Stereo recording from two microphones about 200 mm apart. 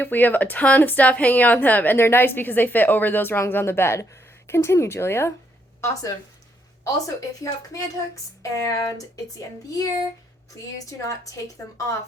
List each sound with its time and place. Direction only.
0.0 s speech: 10° left (ahead or behind)
10.5 s speech: 15° left (ahead or behind)